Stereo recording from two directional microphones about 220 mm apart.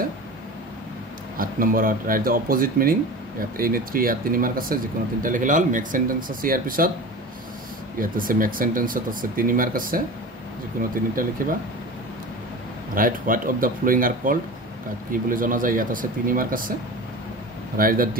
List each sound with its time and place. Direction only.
1.4 s speech: 40° right (ahead or behind)
8.0 s speech: 40° right (ahead or behind)
11.4 s speech: 40° right (ahead or behind)
12.9 s speech: 40° right (ahead or behind)
17.7 s speech: 40° right (ahead or behind)